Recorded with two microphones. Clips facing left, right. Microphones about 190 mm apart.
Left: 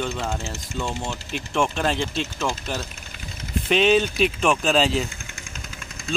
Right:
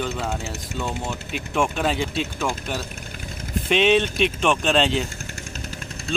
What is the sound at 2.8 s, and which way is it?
Engine, 50° right (ahead or behind).